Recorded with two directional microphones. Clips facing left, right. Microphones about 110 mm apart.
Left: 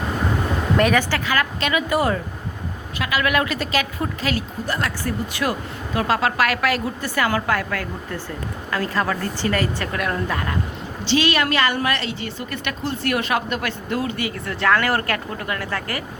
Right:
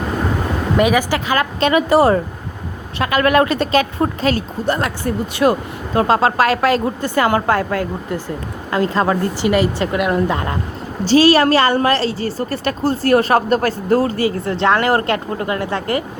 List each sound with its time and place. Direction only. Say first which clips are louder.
0.8 s a woman's voice: right 4 dB; 10° right (ahead or behind); by 10.6 s 25° right (ahead or behind)
11.0 s a woman's voice: right 9 dB; 40° right (ahead or behind)